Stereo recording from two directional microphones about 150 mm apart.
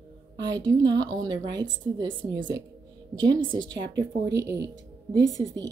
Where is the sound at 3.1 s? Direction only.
30° right (ahead or behind).